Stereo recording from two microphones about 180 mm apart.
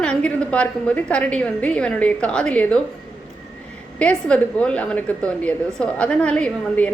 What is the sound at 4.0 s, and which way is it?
A woman's voice, 5° left (ahead or behind).